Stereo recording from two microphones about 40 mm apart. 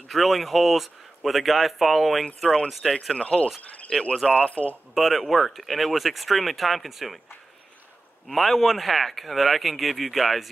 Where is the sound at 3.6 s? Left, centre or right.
Left.